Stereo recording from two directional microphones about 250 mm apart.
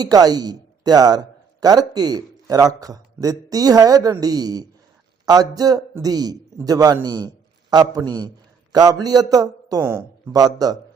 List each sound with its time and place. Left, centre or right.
0.0 s a man's voice: centre